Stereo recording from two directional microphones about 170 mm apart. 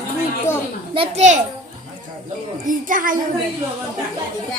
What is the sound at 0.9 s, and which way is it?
Speech, 35° right (ahead or behind).